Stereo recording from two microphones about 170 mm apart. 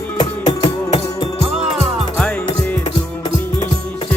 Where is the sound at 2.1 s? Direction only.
10° left (ahead or behind).